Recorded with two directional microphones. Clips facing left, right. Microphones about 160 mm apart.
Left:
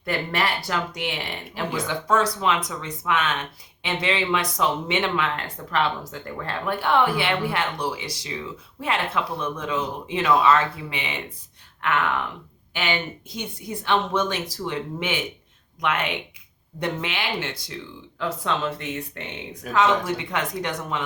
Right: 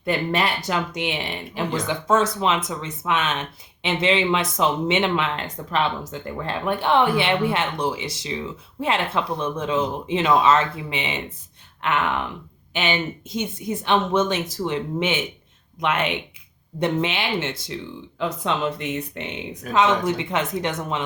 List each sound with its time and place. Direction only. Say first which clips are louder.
0.0 s speech: right 3 dB; 20° right (ahead or behind)